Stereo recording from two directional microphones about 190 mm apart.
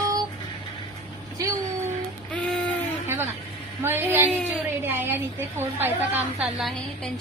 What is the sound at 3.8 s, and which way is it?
A woman's voice, 10° right (ahead or behind).